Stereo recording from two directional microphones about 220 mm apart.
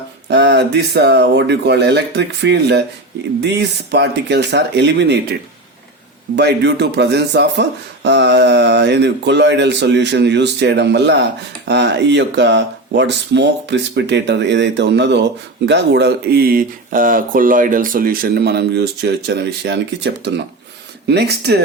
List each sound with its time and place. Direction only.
0.3 s speech: 50° right (ahead or behind)
6.3 s speech: 50° right (ahead or behind)